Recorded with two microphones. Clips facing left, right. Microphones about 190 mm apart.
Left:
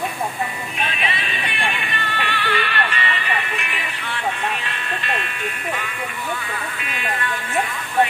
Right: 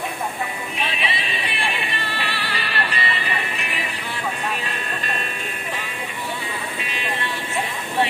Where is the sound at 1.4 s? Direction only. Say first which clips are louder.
Left 2 dB; 35° right (ahead or behind).